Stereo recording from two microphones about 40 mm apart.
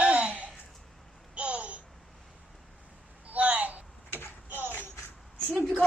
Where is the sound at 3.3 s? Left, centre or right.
Right.